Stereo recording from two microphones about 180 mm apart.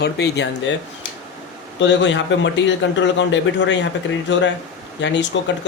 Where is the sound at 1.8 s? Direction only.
90° left.